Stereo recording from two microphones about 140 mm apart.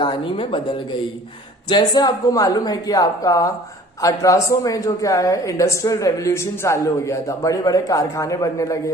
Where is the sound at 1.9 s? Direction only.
30° left (ahead or behind).